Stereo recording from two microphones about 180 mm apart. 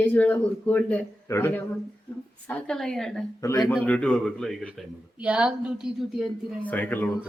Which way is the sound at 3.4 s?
15° left (ahead or behind).